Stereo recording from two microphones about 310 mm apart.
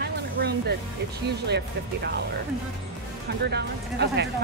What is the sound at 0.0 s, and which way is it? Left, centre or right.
Music, right.